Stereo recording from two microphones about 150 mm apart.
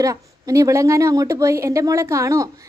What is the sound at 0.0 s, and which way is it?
A woman's voice, 20° right (ahead or behind).